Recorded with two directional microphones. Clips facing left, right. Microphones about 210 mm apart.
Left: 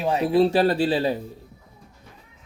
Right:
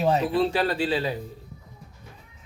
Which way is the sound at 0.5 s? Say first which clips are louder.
Left 5 dB; 35° left (ahead or behind).